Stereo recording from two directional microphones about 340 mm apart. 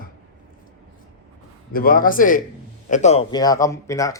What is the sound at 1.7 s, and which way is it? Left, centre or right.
A man's voice, left.